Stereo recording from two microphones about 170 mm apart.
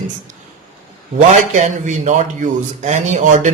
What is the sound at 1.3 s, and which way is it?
A man's voice, 45° right (ahead or behind).